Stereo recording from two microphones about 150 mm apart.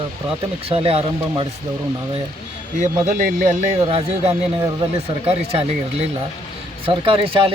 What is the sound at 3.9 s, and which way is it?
Speech, 40° right (ahead or behind).